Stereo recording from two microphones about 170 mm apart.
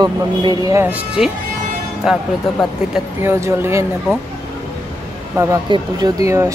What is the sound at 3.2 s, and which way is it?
Speech, 15° right (ahead or behind).